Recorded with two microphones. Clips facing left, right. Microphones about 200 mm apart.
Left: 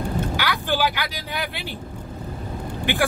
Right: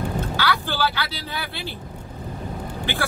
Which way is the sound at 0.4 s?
15° left (ahead or behind).